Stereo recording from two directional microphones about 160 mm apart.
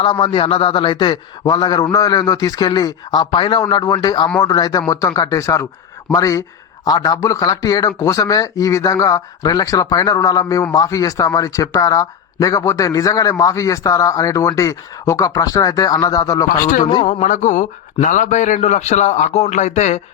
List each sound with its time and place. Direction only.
0.0 s a man's voice: 30° left (ahead or behind)
17.1 s a man's voice: 55° left (ahead or behind)